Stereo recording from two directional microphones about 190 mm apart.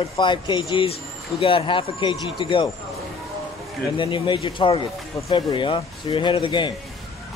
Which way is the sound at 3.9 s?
25° left (ahead or behind).